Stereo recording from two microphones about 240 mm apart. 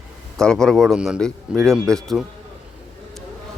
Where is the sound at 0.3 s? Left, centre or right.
Centre.